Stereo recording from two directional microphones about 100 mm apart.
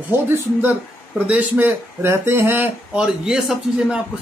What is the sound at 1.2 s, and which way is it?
Speech, 15° right (ahead or behind).